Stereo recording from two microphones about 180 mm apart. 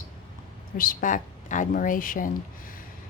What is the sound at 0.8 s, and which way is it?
A woman's voice, 50° left (ahead or behind).